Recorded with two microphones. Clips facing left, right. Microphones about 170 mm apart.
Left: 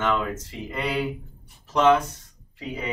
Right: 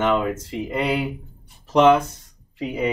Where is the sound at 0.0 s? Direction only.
20° right (ahead or behind).